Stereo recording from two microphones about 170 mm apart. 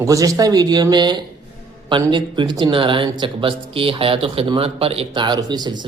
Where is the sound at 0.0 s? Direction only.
20° right (ahead or behind).